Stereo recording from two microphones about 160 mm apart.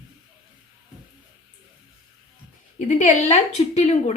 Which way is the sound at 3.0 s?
45° left (ahead or behind).